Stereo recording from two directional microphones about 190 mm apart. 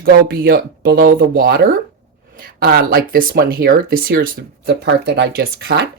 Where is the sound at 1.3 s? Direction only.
50° right (ahead or behind).